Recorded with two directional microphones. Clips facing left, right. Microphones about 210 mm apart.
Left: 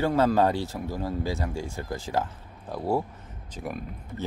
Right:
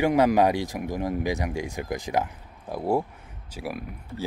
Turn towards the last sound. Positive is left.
turn(degrees=-10)  # may be behind; listen again after turning